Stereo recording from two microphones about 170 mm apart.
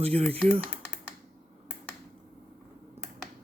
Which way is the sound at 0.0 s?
35° right (ahead or behind).